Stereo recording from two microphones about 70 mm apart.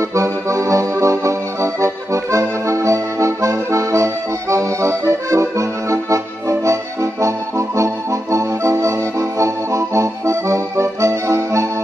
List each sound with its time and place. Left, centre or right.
0.1 s accordion: right